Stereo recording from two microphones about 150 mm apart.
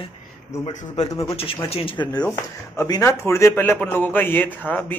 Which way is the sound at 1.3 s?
40° left (ahead or behind).